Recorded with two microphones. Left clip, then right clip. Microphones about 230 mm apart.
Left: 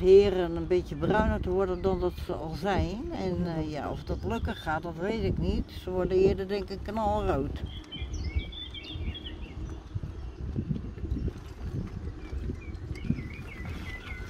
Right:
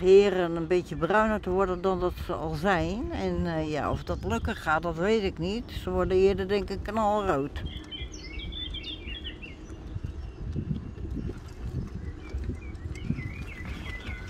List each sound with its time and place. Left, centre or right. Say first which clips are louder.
0.0 s speech: right 1 dB; centre